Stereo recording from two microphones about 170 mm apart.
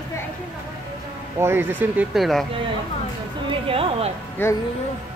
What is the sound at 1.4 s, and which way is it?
Speech, 15° right (ahead or behind).